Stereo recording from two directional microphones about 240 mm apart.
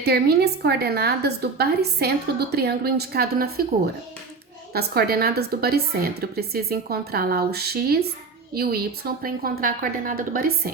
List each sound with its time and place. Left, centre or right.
0.0 s a woman's voice: right
4.7 s a woman's voice: right